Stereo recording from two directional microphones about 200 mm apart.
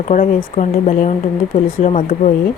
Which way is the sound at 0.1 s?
35° left (ahead or behind).